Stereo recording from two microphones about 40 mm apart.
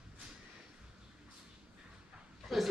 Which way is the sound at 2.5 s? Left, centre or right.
Centre.